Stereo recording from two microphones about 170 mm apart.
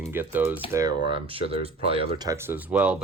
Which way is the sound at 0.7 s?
20° right (ahead or behind).